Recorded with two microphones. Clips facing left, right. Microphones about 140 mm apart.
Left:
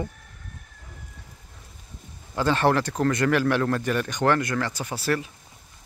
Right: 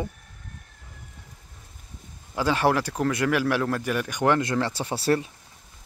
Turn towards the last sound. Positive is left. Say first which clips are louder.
# right 3 dB
turn(degrees=-30)  # may be behind; listen again after turning